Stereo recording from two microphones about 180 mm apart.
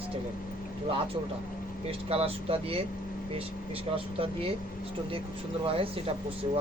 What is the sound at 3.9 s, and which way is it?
Speech, 30° right (ahead or behind).